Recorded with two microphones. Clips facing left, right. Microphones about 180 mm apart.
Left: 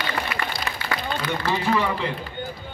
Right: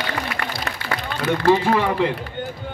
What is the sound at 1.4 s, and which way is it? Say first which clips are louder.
Speech: right 6 dB; 50° right (ahead or behind).